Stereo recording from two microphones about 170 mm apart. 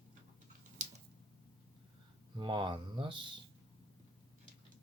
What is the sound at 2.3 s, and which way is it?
Speech, 25° right (ahead or behind).